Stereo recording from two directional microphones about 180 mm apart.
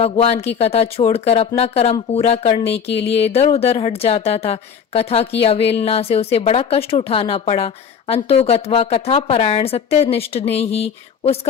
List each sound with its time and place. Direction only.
0.0 s speech: 35° left (ahead or behind)